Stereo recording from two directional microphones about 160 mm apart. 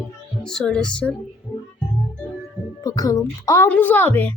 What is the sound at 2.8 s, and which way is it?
A woman's voice, 25° left (ahead or behind).